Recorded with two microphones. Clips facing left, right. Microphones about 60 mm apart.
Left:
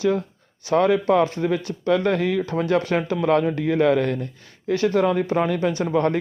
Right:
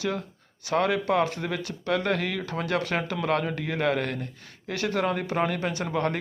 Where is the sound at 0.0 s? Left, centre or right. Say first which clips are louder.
Left 8 dB; left.